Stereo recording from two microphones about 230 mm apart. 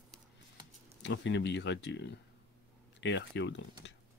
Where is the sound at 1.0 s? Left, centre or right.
Left.